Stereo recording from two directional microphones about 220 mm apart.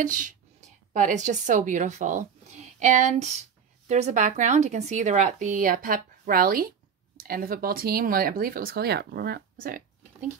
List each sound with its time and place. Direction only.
0.0 s a woman's voice: 35° right (ahead or behind)